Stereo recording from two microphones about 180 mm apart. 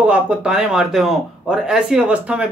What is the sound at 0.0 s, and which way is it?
Speech, 5° right (ahead or behind).